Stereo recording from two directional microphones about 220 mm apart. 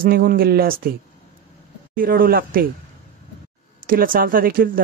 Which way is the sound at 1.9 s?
40° right (ahead or behind).